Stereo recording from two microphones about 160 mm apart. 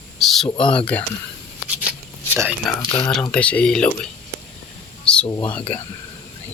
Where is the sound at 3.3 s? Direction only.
5° left (ahead or behind).